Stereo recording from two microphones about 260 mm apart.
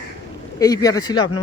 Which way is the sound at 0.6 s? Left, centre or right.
Centre.